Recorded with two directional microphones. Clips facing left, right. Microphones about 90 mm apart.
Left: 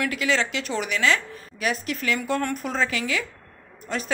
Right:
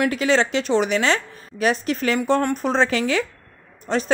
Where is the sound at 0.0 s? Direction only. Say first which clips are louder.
Right 5 dB; 30° right (ahead or behind).